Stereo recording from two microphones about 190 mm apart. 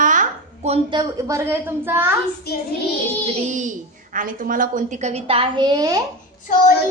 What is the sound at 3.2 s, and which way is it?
A woman's voice, 35° right (ahead or behind).